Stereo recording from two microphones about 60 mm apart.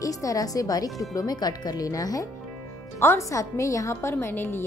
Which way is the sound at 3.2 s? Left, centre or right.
Left.